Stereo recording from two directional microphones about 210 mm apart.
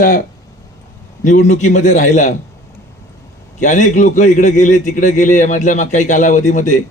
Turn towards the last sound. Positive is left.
turn(degrees=35)  # may be behind; listen again after turning